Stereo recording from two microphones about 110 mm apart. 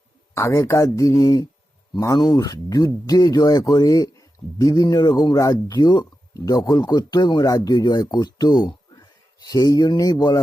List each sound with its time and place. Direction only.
0.3 s a man's voice: 30° left (ahead or behind)
8.6 s a sound: 40° left (ahead or behind)
10.0 s a man's voice: 35° left (ahead or behind)